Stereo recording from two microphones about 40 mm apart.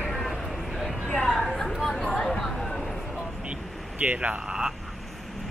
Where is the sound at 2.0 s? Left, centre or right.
Centre.